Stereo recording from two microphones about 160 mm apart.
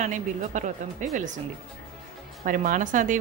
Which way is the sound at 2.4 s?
55° right (ahead or behind).